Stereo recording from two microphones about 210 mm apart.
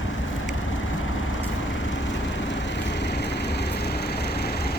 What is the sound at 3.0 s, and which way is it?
Vehicle, 55° left (ahead or behind).